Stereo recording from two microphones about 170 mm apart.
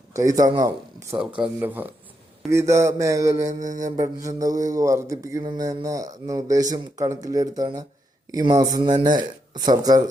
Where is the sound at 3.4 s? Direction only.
45° right (ahead or behind).